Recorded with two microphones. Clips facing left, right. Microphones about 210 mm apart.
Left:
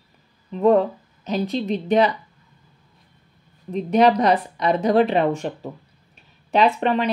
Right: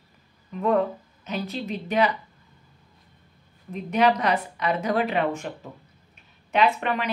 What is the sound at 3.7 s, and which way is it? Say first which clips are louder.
Speech: left 5 dB; 35° left (ahead or behind).